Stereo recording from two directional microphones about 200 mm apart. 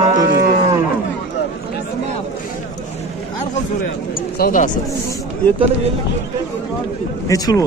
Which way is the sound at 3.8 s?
45° left (ahead or behind).